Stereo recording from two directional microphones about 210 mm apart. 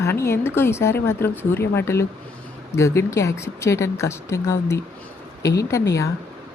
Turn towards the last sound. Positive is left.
turn(degrees=15)  # may be behind; listen again after turning